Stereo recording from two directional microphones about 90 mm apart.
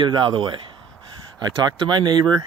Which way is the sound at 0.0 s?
65° right (ahead or behind).